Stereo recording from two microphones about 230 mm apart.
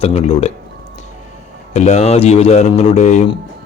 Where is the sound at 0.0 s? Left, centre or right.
Left.